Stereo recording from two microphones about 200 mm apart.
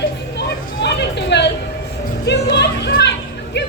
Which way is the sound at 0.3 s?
55° left (ahead or behind).